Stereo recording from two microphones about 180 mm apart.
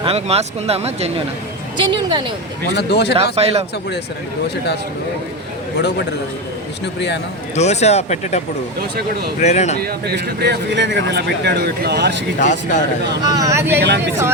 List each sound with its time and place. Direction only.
0.0 s speech: 35° right (ahead or behind)
1.8 s speech: 25° right (ahead or behind)
2.7 s speech: 65° left (ahead or behind)
3.3 s speech: 35° right (ahead or behind)
7.5 s speech: 40° left (ahead or behind)
9.4 s speech: 40° left (ahead or behind)
9.7 s speech: 60° right (ahead or behind)
12.4 s speech: 45° left (ahead or behind)
13.2 s speech: 20° right (ahead or behind)